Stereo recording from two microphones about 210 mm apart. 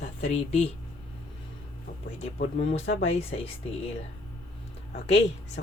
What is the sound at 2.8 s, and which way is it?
Speech, 60° left (ahead or behind).